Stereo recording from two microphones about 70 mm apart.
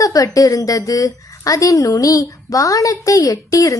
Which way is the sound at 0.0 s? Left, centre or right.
Left.